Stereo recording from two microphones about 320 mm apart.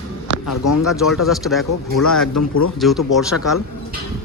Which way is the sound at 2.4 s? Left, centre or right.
Left.